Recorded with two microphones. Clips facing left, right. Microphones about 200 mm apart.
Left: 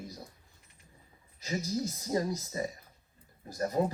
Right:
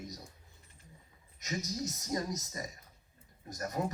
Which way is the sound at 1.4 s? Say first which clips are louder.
Left 4 dB; 30° left (ahead or behind).